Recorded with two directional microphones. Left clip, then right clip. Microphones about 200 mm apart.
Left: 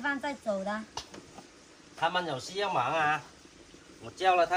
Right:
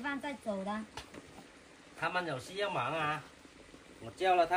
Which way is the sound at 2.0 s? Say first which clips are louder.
Left 5 dB; 30° left (ahead or behind).